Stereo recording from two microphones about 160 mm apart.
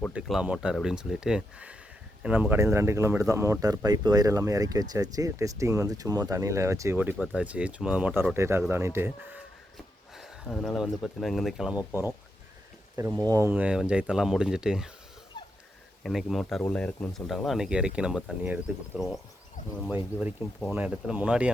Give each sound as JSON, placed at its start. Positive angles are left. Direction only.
{"t": 0.1, "sound": "speech", "side_deg": -5}
{"t": 10.2, "sound": "speech", "side_deg": 0}
{"t": 13.0, "sound": "speech", "side_deg": -20}
{"t": 13.5, "sound": "speech", "side_deg": -10}
{"t": 16.0, "sound": "speech", "side_deg": 0}
{"t": 20.1, "sound": "speech", "side_deg": 0}